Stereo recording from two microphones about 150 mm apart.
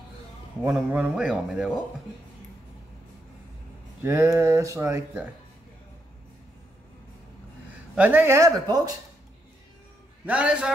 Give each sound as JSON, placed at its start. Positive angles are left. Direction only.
{"t": 0.7, "sound": "speech", "side_deg": -10}
{"t": 4.0, "sound": "speech", "side_deg": -20}
{"t": 7.9, "sound": "speech", "side_deg": -10}
{"t": 10.2, "sound": "speech", "side_deg": -10}